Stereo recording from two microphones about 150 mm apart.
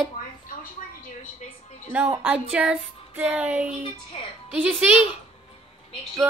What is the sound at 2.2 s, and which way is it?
Speech, 10° right (ahead or behind).